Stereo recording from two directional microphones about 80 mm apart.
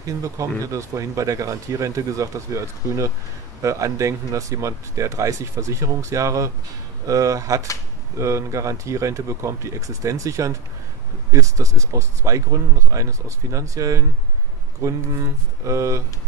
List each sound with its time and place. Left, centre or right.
0.0 s speech: right